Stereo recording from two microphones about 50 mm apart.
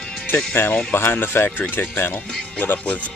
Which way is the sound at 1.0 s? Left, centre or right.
Left.